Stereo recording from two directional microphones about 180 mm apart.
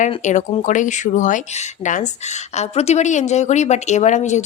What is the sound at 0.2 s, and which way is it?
Speech, 40° left (ahead or behind).